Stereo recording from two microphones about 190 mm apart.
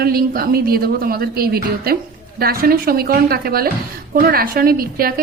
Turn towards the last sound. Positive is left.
turn(degrees=-50)  # may be behind; listen again after turning